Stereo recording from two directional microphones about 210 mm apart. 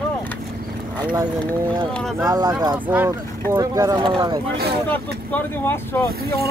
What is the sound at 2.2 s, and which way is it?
Speech, 20° right (ahead or behind).